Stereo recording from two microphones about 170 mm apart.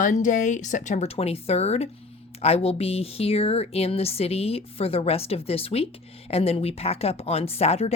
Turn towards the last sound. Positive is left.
turn(degrees=35)  # may be behind; listen again after turning